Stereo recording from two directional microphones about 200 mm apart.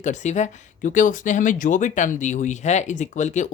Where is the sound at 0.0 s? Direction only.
35° left (ahead or behind).